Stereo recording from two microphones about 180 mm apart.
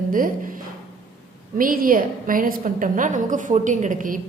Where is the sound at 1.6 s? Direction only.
50° right (ahead or behind).